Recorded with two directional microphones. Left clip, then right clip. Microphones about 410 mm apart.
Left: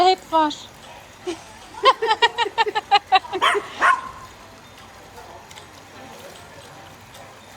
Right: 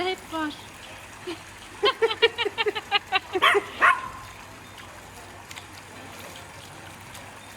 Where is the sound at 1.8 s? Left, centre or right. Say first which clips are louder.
Left 5 dB; centre.